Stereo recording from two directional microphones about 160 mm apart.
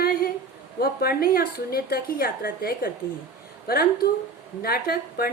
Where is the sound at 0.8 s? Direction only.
75° left (ahead or behind).